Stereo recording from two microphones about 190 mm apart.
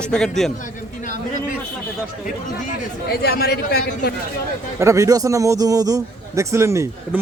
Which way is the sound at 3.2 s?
55° left (ahead or behind).